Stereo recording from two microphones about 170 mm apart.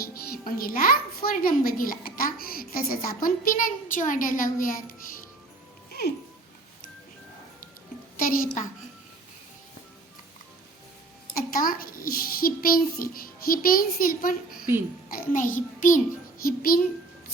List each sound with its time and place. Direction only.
0.0 s a child's voice: 60° left (ahead or behind)
8.2 s a child's voice: 55° left (ahead or behind)
11.5 s a child's voice: 55° left (ahead or behind)
15.3 s child singing: 50° left (ahead or behind)
16.4 s a child's voice: 60° left (ahead or behind)